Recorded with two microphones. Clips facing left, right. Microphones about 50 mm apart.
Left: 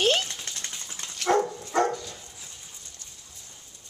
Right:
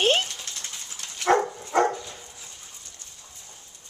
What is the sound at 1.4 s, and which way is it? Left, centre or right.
Dog, centre.